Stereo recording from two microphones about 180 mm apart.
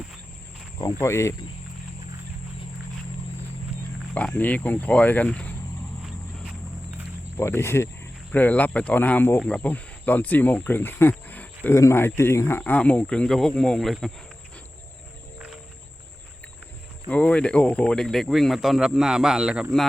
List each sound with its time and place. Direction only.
0.8 s speech: 15° left (ahead or behind)
4.1 s speech: 10° left (ahead or behind)
6.4 s walk: 5° right (ahead or behind)
7.3 s speech: 15° left (ahead or behind)
17.1 s speech: 5° left (ahead or behind)